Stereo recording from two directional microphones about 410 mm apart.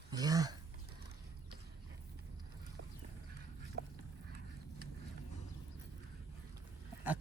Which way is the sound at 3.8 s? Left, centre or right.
Right.